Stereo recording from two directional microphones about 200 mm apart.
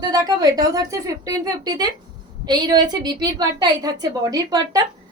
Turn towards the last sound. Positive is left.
turn(degrees=-20)  # may be behind; listen again after turning